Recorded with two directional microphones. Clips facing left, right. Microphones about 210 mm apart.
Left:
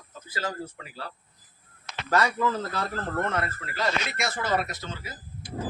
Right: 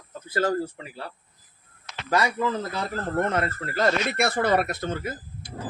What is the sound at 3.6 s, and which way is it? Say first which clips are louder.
Speech: right 6 dB; 50° right (ahead or behind).